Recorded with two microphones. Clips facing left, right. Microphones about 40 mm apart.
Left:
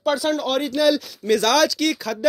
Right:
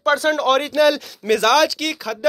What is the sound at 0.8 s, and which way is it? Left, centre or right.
Speech, right.